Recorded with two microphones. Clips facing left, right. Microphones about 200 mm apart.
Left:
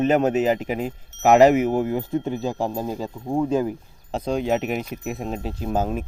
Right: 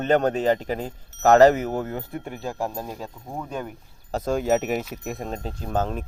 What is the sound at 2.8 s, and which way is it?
Speech, 30° left (ahead or behind).